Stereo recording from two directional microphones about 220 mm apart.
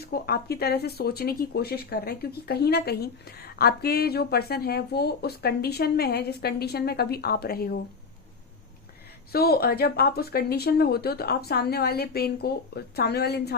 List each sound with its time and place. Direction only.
0.0 s speech: 45° left (ahead or behind)
9.3 s speech: 45° left (ahead or behind)